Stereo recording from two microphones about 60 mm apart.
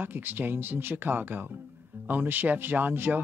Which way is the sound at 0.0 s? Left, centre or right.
Right.